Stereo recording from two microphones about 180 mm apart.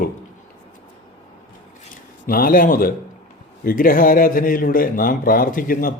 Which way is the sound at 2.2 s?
55° left (ahead or behind).